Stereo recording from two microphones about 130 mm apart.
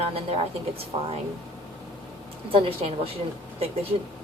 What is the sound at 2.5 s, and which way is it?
Speech, 45° right (ahead or behind).